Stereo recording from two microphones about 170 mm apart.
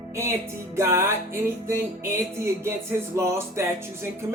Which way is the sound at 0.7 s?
15° right (ahead or behind).